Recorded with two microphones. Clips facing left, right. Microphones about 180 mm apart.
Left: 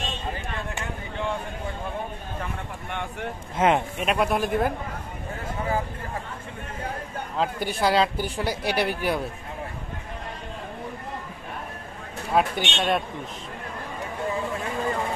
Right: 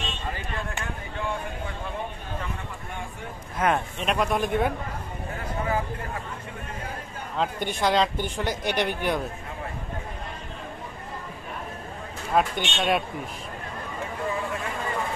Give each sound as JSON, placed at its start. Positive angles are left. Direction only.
{"t": 2.9, "sound": "vehicle", "side_deg": 75}
{"t": 3.5, "sound": "speech", "side_deg": 20}
{"t": 4.0, "sound": "a woman's voice", "side_deg": 5}
{"t": 7.3, "sound": "a woman's voice", "side_deg": 5}
{"t": 12.4, "sound": "a woman's voice", "side_deg": 0}